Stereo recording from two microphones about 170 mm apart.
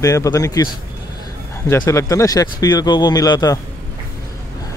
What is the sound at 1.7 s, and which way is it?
Speech, 20° left (ahead or behind).